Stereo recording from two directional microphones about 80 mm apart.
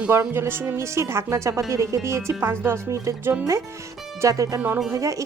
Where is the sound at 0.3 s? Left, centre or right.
Right.